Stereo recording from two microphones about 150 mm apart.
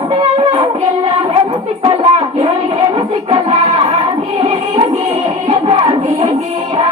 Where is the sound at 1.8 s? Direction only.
40° right (ahead or behind).